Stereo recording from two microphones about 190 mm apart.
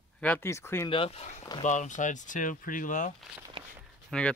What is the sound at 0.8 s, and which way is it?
Speech, 30° left (ahead or behind).